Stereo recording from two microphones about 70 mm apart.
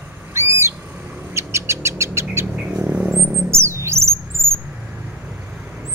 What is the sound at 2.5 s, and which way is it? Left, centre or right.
Bird, right.